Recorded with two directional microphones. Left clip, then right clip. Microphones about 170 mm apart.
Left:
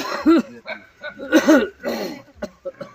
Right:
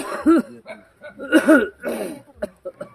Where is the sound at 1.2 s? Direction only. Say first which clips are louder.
Even; 40° left (ahead or behind).